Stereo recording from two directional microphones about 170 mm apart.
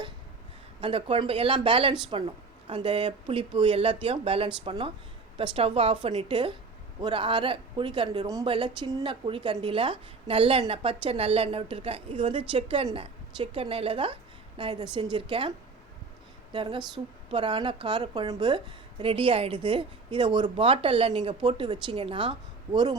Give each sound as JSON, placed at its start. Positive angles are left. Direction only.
{"t": 0.8, "sound": "a woman's voice", "side_deg": -30}